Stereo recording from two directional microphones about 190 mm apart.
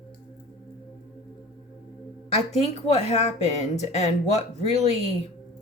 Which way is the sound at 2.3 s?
35° left (ahead or behind).